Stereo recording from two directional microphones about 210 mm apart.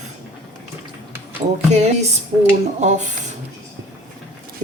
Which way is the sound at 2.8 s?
35° right (ahead or behind).